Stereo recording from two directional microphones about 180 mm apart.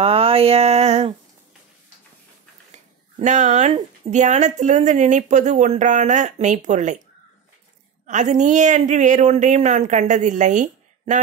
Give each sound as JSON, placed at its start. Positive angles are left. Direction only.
{"t": 0.0, "sound": "a sound", "side_deg": -30}
{"t": 3.2, "sound": "speech", "side_deg": -40}
{"t": 8.1, "sound": "a woman's voice", "side_deg": -40}